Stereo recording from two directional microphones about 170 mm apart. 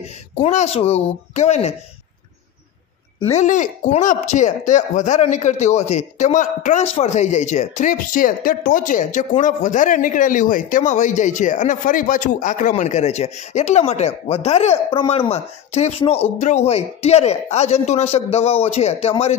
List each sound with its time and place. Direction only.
0.4 s a child's voice: 45° left (ahead or behind)
3.3 s speech: 45° left (ahead or behind)